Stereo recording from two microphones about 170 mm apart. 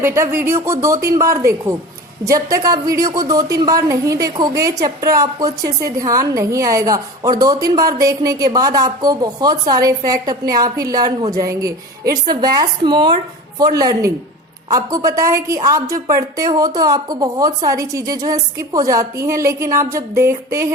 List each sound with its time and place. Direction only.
0.0 s a woman's voice: 15° right (ahead or behind)